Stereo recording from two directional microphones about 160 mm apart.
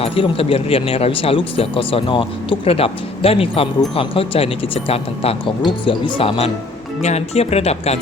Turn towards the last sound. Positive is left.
turn(degrees=40)  # may be behind; listen again after turning